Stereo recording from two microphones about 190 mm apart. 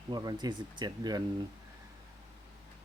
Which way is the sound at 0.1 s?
20° right (ahead or behind).